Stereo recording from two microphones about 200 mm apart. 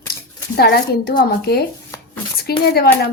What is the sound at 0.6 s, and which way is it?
Speech, 50° left (ahead or behind).